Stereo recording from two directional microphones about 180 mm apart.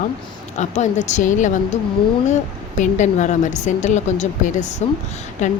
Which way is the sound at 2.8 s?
40° left (ahead or behind).